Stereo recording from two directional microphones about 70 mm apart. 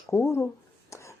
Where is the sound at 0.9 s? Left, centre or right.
Left.